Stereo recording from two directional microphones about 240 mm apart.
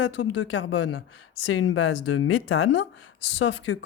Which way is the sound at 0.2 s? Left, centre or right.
Left.